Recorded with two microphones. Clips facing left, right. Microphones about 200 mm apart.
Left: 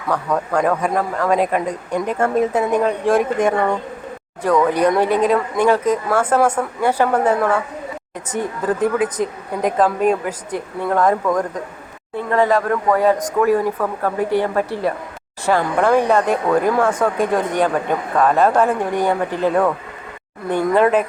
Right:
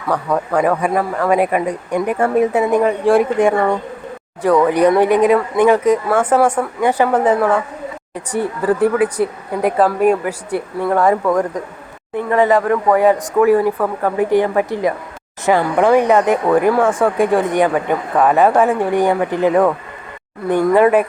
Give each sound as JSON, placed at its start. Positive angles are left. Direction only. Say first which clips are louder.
{"t": 0.1, "sound": "speech", "louder": "right 2 dB", "side_deg": -5}
{"t": 4.7, "sound": "speech", "louder": "right 4 dB", "side_deg": -15}